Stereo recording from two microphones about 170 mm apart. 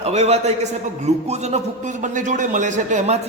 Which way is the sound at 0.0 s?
40° right (ahead or behind).